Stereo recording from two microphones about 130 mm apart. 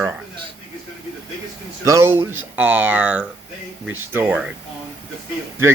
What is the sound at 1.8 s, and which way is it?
Speech, 20° right (ahead or behind).